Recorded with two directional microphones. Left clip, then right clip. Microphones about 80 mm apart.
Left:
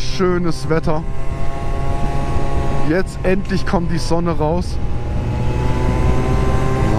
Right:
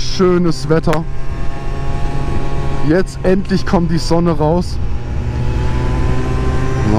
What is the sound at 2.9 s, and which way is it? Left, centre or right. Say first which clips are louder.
Speech: right 5 dB; centre.